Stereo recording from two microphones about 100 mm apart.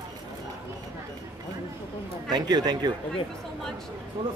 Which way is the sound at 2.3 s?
45° right (ahead or behind).